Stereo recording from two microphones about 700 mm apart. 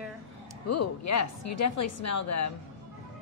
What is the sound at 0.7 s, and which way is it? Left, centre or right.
A woman's voice, left.